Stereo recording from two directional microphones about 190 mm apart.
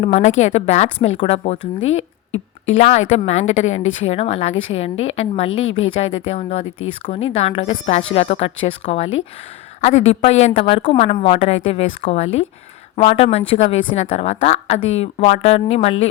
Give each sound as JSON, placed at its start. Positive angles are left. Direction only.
{"t": 0.0, "sound": "a woman's voice", "side_deg": 35}
{"t": 1.8, "sound": "a sound", "side_deg": 90}
{"t": 2.7, "sound": "a woman's voice", "side_deg": 35}
{"t": 10.1, "sound": "a woman's voice", "side_deg": 35}